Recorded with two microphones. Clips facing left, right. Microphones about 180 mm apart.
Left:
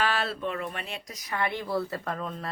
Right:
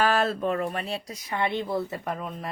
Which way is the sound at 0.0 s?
45° right (ahead or behind).